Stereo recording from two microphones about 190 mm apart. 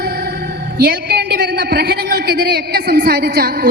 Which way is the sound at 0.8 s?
55° right (ahead or behind).